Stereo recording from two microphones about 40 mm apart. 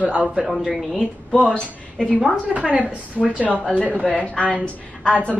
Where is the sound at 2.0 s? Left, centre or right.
Left.